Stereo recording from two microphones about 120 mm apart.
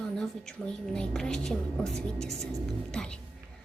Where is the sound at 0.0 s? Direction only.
5° left (ahead or behind).